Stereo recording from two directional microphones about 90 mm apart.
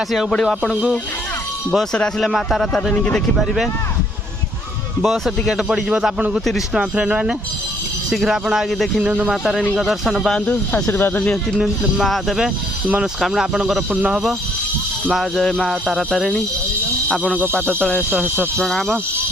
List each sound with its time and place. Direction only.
0.1 s speech: 5° left (ahead or behind)
1.7 s speech: 5° left (ahead or behind)
2.9 s speech: 15° left (ahead or behind)
3.3 s speech: centre (ahead or behind)
5.0 s speech: centre (ahead or behind)
9.4 s speech: centre (ahead or behind)
10.3 s speech: 15° left (ahead or behind)
11.2 s speech: 5° left (ahead or behind)
15.1 s speech: centre (ahead or behind)
17.7 s speech: 15° left (ahead or behind)
18.5 s speech: 5° left (ahead or behind)